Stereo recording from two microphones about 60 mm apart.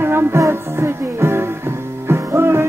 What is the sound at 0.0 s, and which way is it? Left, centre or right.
Music, right.